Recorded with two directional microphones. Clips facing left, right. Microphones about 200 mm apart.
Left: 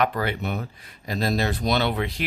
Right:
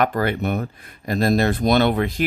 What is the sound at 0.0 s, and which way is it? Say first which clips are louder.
Speech: right 4 dB; 50° right (ahead or behind).